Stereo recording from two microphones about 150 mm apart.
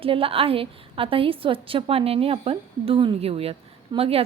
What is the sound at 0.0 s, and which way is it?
A woman's voice, 40° right (ahead or behind).